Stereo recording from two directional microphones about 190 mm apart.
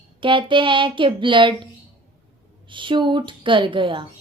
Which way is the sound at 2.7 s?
25° right (ahead or behind).